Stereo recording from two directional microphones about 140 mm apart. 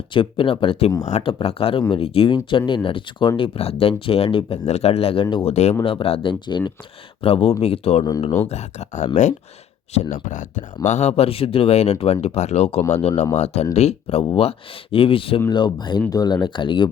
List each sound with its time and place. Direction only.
0.1 s speech: 40° left (ahead or behind); by 10.6 s 65° left (ahead or behind)
10.8 s speech: 50° left (ahead or behind); by 16.9 s 35° left (ahead or behind)